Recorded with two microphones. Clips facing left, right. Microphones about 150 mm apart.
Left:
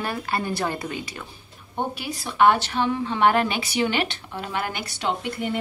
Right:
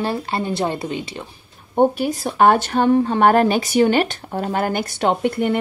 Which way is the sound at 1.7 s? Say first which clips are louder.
Right 12 dB; 45° right (ahead or behind).